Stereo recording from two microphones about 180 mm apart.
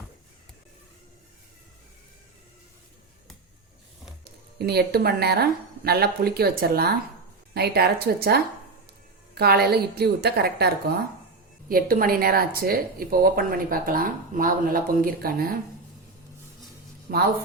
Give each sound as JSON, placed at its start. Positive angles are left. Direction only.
{"t": 4.2, "sound": "speech", "side_deg": -60}
{"t": 17.1, "sound": "speech", "side_deg": -60}